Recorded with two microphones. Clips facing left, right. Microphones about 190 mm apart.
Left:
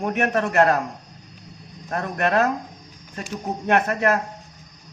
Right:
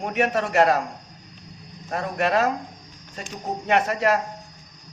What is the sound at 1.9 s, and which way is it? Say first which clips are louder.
Speech: left 1 dB; 55° left (ahead or behind).